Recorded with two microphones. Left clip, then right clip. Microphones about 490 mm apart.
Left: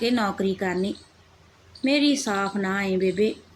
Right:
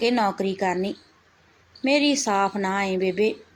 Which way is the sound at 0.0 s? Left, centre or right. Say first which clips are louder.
Right 2 dB; left.